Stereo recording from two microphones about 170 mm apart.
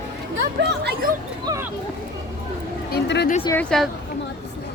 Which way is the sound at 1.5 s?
15° right (ahead or behind).